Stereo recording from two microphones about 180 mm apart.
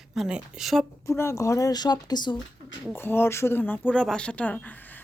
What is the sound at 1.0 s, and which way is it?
A woman's voice, 15° left (ahead or behind).